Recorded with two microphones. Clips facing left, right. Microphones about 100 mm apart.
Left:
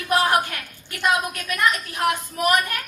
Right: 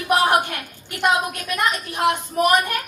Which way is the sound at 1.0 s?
25° right (ahead or behind).